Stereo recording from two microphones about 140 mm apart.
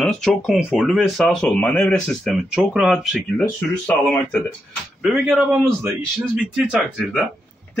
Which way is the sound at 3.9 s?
10° left (ahead or behind).